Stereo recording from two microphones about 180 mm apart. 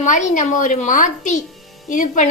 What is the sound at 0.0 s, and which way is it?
A woman's voice, 45° left (ahead or behind).